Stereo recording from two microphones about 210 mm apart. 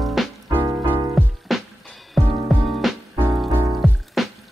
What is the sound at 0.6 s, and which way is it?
Music, 20° right (ahead or behind).